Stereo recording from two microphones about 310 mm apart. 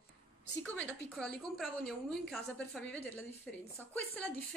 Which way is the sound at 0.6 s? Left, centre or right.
Centre.